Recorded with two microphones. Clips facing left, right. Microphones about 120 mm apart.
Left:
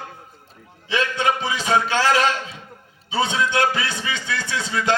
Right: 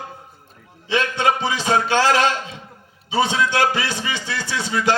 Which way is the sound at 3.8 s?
25° right (ahead or behind).